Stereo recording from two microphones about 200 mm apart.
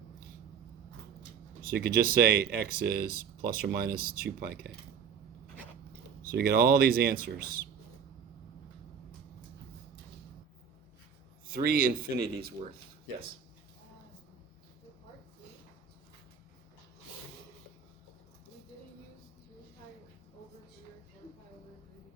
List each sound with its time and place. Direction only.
1.7 s speech: 50° right (ahead or behind)
6.3 s speech: 50° right (ahead or behind)
11.4 s speech: 50° right (ahead or behind)